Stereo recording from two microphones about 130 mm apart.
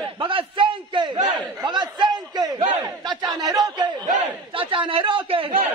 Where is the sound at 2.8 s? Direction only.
30° right (ahead or behind).